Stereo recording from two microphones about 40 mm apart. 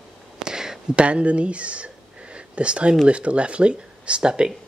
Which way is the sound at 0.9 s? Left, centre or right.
Right.